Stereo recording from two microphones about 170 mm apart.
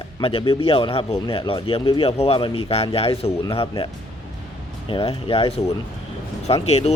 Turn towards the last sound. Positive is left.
turn(degrees=40)  # may be behind; listen again after turning